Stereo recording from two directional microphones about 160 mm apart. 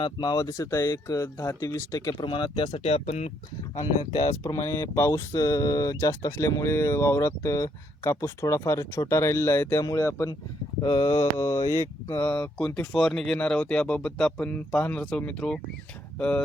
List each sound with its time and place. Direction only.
0.0 s speech: 25° left (ahead or behind); by 3.3 s 40° left (ahead or behind)
4.3 s speech: 20° left (ahead or behind)